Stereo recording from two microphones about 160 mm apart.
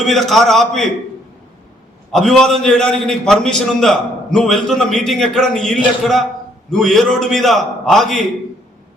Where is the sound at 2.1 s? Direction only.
5° left (ahead or behind).